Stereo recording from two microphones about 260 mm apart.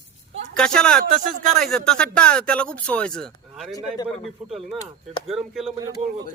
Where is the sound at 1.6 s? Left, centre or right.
Centre.